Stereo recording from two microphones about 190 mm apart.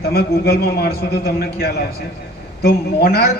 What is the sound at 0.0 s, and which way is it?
A man's voice, 55° left (ahead or behind).